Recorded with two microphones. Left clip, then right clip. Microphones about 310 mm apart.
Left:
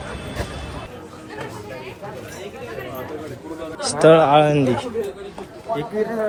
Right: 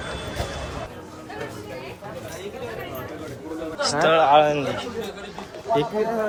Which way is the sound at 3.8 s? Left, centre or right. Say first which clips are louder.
Left 5 dB; centre.